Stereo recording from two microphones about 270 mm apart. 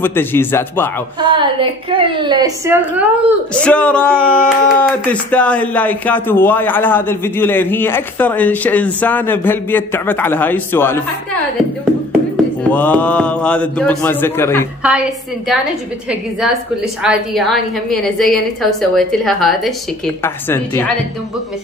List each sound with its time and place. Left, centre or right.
0.0 s speech: centre
1.2 s a woman's voice: centre
3.6 s speech: centre
12.7 s a woman's voice: centre
14.8 s a woman's voice: centre